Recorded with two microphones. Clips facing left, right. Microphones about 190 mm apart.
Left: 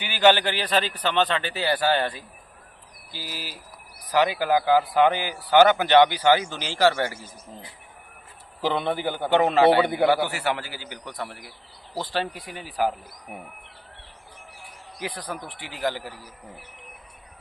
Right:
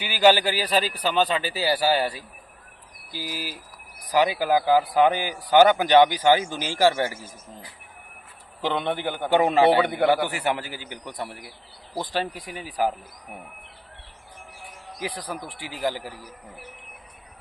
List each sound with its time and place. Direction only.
0.0 s speech: 10° right (ahead or behind)
8.6 s a man's voice: 5° left (ahead or behind)
9.3 s speech: 15° right (ahead or behind)
9.7 s a man's voice: 5° left (ahead or behind)
10.2 s speech: 15° right (ahead or behind)
15.0 s speech: 10° right (ahead or behind)